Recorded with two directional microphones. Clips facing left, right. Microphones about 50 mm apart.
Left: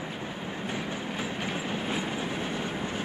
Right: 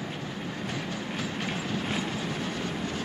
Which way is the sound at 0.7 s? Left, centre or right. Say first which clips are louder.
Left 2 dB; centre.